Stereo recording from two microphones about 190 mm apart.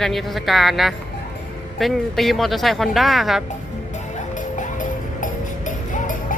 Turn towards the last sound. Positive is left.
turn(degrees=45)  # may be behind; listen again after turning